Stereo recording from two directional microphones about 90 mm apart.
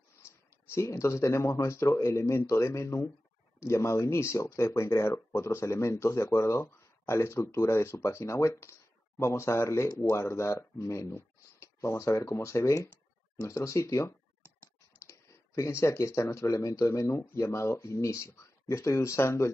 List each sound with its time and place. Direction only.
0.7 s speech: 35° left (ahead or behind)